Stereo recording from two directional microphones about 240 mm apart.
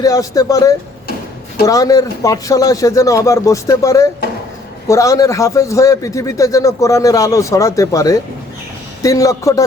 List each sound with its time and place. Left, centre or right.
0.0 s a man's voice: centre